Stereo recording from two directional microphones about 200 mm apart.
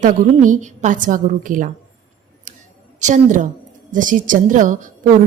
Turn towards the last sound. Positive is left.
turn(degrees=-40)  # may be behind; listen again after turning